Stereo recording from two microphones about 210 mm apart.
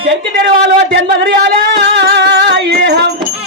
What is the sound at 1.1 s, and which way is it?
Music, 55° right (ahead or behind).